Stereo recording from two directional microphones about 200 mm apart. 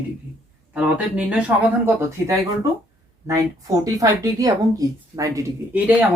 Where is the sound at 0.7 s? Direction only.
5° right (ahead or behind).